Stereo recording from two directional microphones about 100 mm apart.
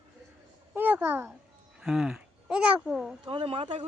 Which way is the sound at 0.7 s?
20° right (ahead or behind).